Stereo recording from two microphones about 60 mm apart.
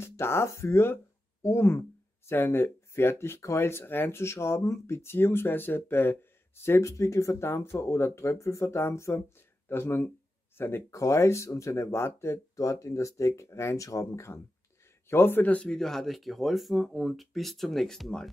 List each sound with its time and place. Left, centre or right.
0.0 s speech: left
10.9 s speech: left
15.0 s speech: left
15.4 s a man's voice: left
15.7 s speech: centre